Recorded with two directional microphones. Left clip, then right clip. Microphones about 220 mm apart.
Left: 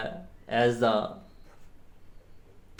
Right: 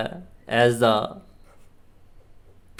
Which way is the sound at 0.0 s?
35° right (ahead or behind).